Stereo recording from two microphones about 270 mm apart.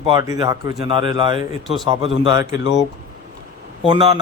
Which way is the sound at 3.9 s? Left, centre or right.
Centre.